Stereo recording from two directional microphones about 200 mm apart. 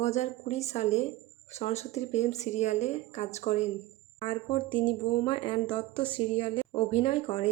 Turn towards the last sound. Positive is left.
turn(degrees=30)  # may be behind; listen again after turning